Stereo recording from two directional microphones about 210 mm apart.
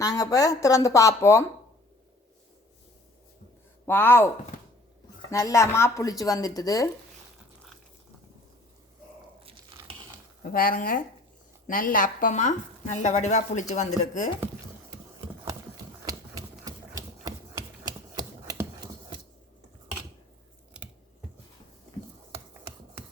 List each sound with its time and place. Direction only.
0.0 s speech: 15° left (ahead or behind)
3.8 s speech: 10° left (ahead or behind)
5.3 s speech: 15° left (ahead or behind)
10.4 s speech: 45° left (ahead or behind)
16.6 s typewriter: 15° right (ahead or behind)